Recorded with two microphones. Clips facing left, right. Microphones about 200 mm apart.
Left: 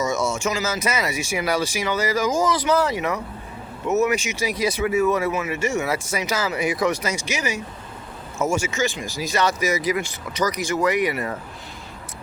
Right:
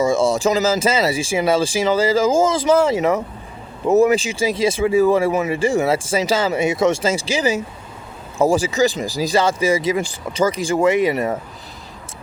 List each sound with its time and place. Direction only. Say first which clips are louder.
0.0 s speech: right 7 dB; 30° right (ahead or behind)